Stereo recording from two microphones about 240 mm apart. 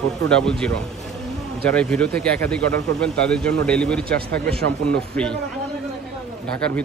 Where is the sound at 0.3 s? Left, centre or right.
Centre.